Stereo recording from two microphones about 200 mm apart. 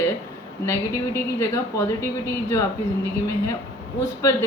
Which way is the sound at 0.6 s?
15° left (ahead or behind).